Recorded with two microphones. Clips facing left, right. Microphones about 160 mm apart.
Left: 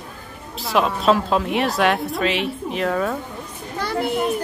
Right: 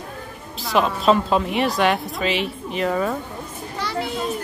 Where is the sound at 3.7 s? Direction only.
55° left (ahead or behind).